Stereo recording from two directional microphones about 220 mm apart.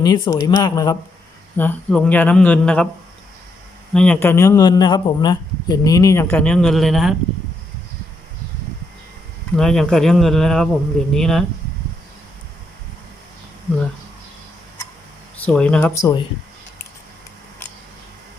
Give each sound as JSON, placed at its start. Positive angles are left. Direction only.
{"t": 0.0, "sound": "a man's voice", "side_deg": 15}
{"t": 1.5, "sound": "a man's voice", "side_deg": 5}
{"t": 3.9, "sound": "a man's voice", "side_deg": 5}
{"t": 9.6, "sound": "speech", "side_deg": 0}
{"t": 15.4, "sound": "a man's voice", "side_deg": 5}